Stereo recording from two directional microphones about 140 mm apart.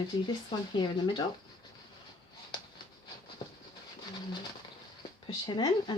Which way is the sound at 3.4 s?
45° left (ahead or behind).